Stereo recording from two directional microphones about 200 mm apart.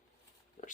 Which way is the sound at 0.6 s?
40° left (ahead or behind).